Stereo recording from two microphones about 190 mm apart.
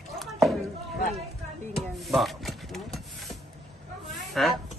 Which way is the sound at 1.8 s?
Centre (ahead or behind).